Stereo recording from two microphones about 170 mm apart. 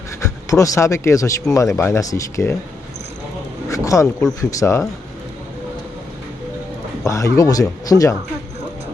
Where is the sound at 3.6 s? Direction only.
20° left (ahead or behind).